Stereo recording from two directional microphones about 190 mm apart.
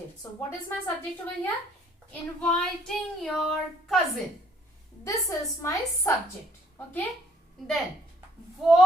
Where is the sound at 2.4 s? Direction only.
5° left (ahead or behind).